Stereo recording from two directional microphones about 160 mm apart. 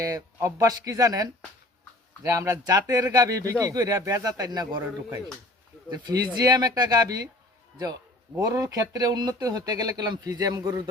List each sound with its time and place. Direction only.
0.0 s speech: 20° right (ahead or behind)
8.4 s speech: 20° right (ahead or behind)